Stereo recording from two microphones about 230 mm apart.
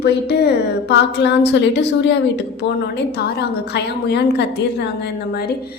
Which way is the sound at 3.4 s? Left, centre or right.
Left.